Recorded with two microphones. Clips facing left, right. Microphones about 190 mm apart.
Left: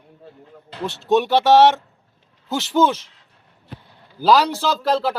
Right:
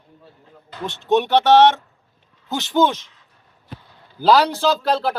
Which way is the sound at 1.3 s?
10° left (ahead or behind).